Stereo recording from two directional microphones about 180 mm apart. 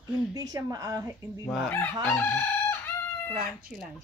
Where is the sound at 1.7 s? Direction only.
10° left (ahead or behind).